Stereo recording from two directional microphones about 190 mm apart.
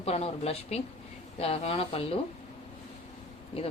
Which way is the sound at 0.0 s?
30° left (ahead or behind).